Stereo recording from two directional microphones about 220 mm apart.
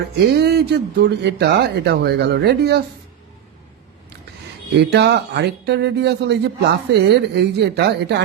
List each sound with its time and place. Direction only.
0.3 s speech: 50° right (ahead or behind)
4.8 s speech: 50° right (ahead or behind)